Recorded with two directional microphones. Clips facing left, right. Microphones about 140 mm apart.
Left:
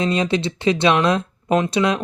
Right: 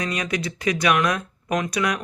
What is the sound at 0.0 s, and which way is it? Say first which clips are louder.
Speech: left 7 dB; 25° left (ahead or behind).